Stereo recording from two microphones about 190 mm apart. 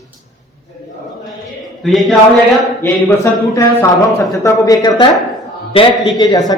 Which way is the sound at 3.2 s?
15° left (ahead or behind).